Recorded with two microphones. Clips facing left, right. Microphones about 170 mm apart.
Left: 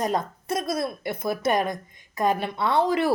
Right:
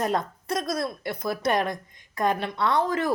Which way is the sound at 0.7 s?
55° left (ahead or behind).